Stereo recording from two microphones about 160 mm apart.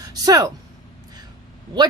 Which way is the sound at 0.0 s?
20° right (ahead or behind).